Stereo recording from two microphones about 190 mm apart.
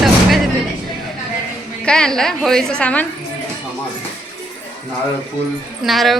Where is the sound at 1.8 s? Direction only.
5° left (ahead or behind).